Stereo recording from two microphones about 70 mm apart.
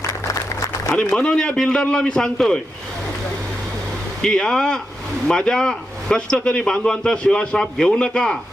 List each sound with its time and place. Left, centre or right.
0.3 s applause: left
0.9 s a man's voice: centre
4.2 s a man's voice: centre